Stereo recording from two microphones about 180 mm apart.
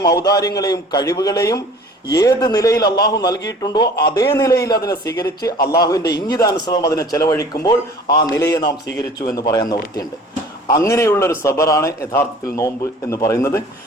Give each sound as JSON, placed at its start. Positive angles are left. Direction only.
{"t": 0.0, "sound": "a man's voice", "side_deg": 20}